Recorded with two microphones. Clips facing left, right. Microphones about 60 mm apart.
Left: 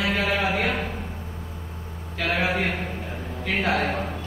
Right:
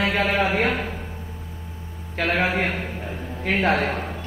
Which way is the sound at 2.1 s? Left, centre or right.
Right.